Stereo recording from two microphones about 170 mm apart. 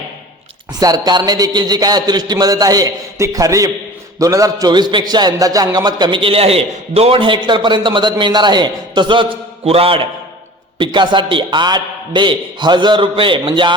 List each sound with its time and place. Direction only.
0.7 s a man's voice: 20° right (ahead or behind)